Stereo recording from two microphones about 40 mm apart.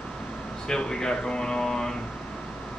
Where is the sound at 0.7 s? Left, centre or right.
Centre.